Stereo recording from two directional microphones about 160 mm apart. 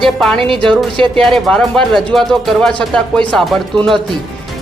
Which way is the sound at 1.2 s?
5° left (ahead or behind).